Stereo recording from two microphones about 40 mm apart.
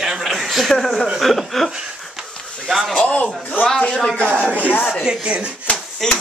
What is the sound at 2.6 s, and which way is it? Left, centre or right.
Speech, centre.